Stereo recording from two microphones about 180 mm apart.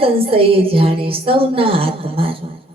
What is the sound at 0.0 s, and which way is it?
A woman's voice, 30° right (ahead or behind).